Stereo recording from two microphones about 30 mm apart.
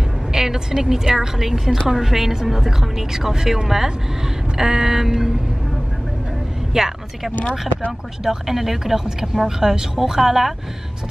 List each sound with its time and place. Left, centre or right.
0.3 s a woman's voice: centre
6.7 s speech: right
8.2 s a woman's voice: centre
9.6 s a woman's voice: centre